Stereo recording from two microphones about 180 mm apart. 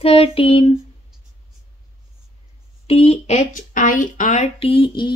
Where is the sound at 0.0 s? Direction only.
30° left (ahead or behind).